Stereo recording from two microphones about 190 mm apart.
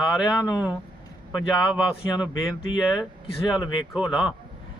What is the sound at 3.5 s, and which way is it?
Speech, 5° right (ahead or behind).